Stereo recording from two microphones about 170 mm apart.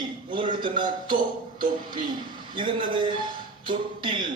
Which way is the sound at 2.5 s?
30° right (ahead or behind).